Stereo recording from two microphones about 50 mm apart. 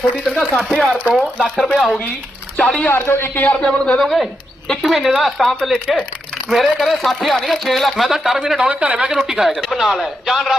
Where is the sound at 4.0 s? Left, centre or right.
Centre.